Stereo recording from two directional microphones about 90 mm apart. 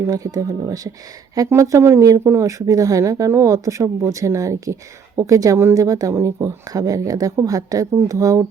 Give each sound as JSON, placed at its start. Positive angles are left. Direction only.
{"t": 0.1, "sound": "speech", "side_deg": -40}